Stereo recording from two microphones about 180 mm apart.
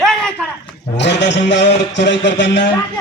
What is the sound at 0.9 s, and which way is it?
Music, 70° left (ahead or behind).